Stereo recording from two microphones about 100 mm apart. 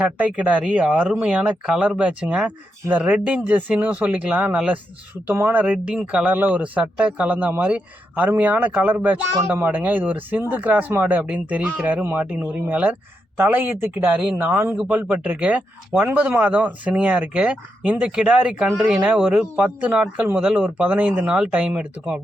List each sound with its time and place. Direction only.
0.2 s speech: 15° right (ahead or behind)
18.7 s speech: centre (ahead or behind)
19.0 s speech: 15° right (ahead or behind)